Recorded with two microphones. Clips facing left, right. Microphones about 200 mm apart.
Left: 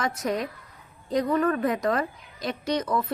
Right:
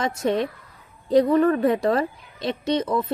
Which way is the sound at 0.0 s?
30° right (ahead or behind).